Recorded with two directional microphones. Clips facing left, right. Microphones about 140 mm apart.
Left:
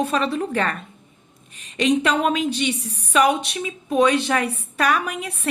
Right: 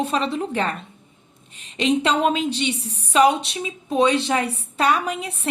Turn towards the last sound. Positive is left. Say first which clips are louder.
# right 1 dB
turn(degrees=-30)  # may be behind; listen again after turning